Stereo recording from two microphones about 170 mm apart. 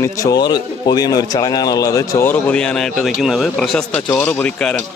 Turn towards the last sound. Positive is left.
turn(degrees=5)  # may be behind; listen again after turning